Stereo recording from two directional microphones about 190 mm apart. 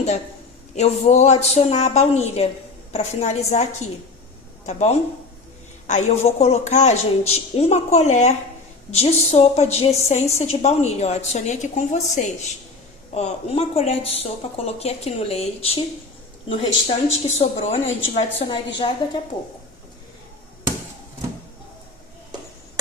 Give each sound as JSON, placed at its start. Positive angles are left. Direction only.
{"t": 0.8, "sound": "a woman's voice", "side_deg": 35}
{"t": 16.8, "sound": "a woman's voice", "side_deg": 35}